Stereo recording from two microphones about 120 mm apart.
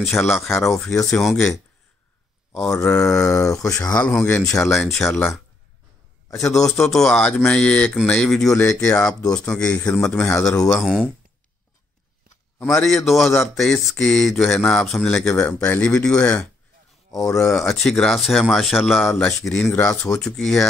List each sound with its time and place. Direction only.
0.0 s speech: 5° left (ahead or behind)
2.5 s speech: 10° left (ahead or behind)
3.3 s speech: 25° left (ahead or behind)
4.0 s speech: 10° left (ahead or behind)
6.3 s speech: centre (ahead or behind)
12.8 s speech: centre (ahead or behind)
17.1 s speech: 30° left (ahead or behind)
17.6 s speech: 5° left (ahead or behind)